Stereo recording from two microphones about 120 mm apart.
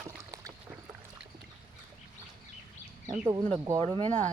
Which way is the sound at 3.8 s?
50° right (ahead or behind).